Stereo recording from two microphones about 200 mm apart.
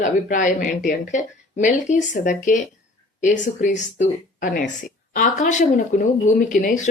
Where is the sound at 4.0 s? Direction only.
40° left (ahead or behind).